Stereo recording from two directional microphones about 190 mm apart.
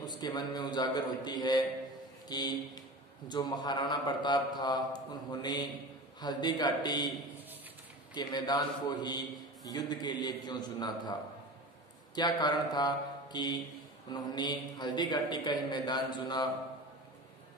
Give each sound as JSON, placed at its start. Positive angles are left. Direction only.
{"t": 0.0, "sound": "speech", "side_deg": 20}
{"t": 8.1, "sound": "speech", "side_deg": 20}
{"t": 12.2, "sound": "speech", "side_deg": 25}